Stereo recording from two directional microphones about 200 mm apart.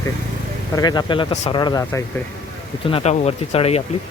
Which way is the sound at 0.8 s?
20° left (ahead or behind).